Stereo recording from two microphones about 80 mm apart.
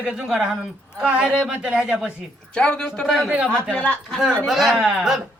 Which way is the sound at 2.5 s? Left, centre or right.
Centre.